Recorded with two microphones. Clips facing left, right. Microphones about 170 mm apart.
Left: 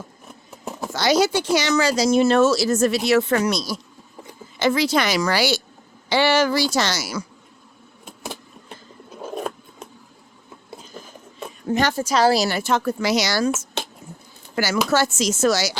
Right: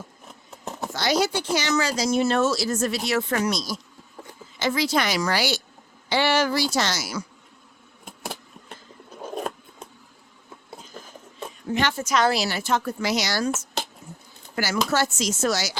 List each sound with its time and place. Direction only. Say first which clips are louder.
0.9 s speech: left 5 dB; 90° left; by 7.3 s 75° left (ahead or behind)
11.7 s a woman's voice: left 3 dB; 40° left (ahead or behind)
12.5 s speech: left 5 dB; 55° left (ahead or behind)
12.7 s speech: left 3 dB; 90° left
14.5 s speech: left 4 dB; 90° left